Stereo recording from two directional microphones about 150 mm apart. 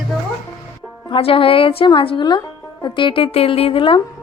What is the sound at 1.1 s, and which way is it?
Speech, 35° left (ahead or behind).